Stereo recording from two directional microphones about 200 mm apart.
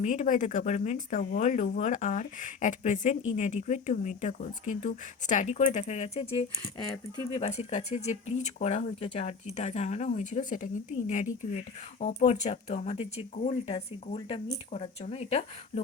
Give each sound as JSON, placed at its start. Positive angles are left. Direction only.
{"t": 0.0, "sound": "speech", "side_deg": 40}